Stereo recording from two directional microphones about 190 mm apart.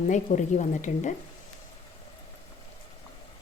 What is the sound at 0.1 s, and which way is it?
A woman's voice, 40° left (ahead or behind).